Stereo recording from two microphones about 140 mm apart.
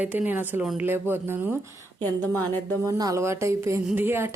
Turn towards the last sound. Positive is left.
turn(degrees=-15)  # may be behind; listen again after turning